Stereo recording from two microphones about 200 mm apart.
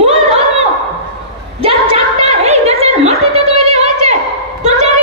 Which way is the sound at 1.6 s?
30° right (ahead or behind).